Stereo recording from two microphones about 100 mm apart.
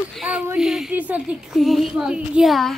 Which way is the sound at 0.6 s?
5° right (ahead or behind).